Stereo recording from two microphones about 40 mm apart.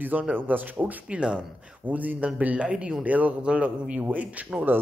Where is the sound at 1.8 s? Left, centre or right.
Right.